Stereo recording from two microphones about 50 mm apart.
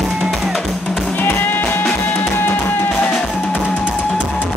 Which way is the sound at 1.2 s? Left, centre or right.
Left.